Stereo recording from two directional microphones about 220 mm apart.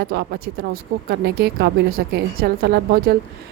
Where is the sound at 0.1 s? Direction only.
45° right (ahead or behind).